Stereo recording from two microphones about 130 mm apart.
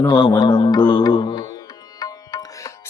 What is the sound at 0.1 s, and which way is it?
Mantra, 35° left (ahead or behind).